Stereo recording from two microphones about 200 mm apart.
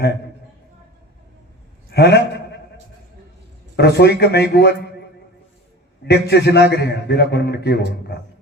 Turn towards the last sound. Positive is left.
turn(degrees=55)  # may be behind; listen again after turning